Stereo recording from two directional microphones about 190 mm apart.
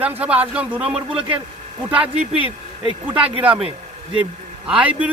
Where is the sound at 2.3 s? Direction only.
30° right (ahead or behind).